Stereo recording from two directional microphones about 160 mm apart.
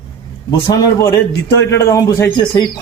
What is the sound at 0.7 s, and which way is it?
A man's voice, 25° left (ahead or behind).